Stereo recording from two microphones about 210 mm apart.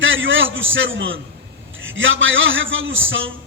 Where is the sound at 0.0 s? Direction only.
65° right (ahead or behind).